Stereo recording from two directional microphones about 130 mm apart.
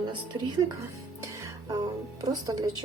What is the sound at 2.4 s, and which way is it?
Speech, 25° right (ahead or behind).